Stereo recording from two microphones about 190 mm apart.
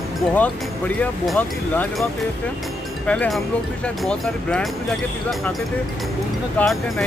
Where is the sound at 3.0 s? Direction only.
5° left (ahead or behind).